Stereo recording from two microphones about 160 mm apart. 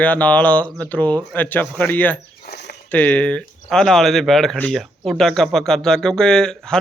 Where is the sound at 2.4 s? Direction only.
85° left.